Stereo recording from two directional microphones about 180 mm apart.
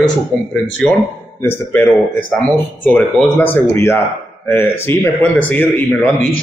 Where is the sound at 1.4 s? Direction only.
10° left (ahead or behind).